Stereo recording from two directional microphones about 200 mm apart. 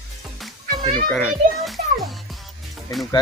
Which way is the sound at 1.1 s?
Centre (ahead or behind).